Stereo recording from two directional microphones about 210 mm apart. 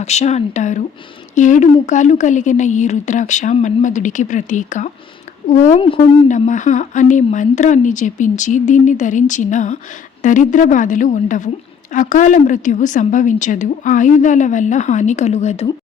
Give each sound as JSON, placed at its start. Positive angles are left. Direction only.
{"t": 0.0, "sound": "a woman's voice", "side_deg": 30}